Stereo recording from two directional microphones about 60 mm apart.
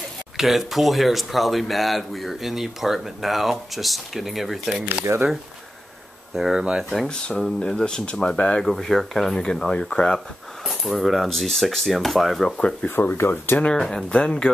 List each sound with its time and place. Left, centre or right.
0.4 s speech: centre
5.1 s speech: right
6.3 s speech: centre
7.1 s speech: centre
10.6 s speech: centre
12.4 s speech: centre
12.8 s speech: left
13.7 s speech: centre